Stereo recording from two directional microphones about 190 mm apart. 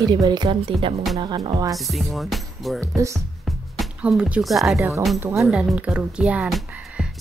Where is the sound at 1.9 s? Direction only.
Centre (ahead or behind).